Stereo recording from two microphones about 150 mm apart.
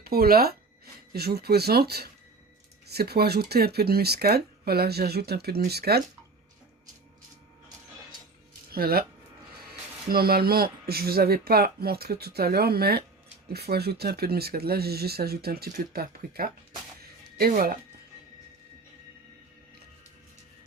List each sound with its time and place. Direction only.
0.0 s speech: 90° right
8.7 s speech: 90° right
10.1 s speech: 90° right
17.0 s music: 90° right